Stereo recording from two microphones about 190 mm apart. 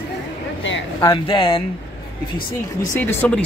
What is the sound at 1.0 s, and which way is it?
Speech, 25° left (ahead or behind).